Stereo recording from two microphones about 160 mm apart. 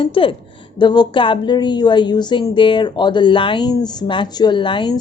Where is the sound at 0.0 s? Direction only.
35° left (ahead or behind).